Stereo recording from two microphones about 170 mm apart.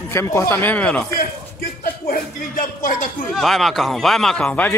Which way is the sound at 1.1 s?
60° left (ahead or behind).